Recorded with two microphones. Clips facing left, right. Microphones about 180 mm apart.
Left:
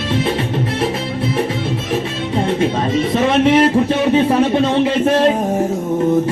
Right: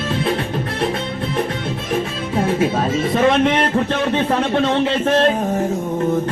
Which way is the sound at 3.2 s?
5° left (ahead or behind).